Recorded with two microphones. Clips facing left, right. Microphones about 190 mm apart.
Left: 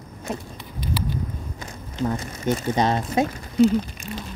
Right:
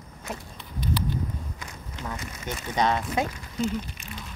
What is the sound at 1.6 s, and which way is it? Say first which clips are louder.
Speech: left 11 dB; 30° left (ahead or behind).